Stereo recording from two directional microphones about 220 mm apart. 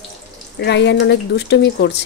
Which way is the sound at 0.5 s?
50° left (ahead or behind).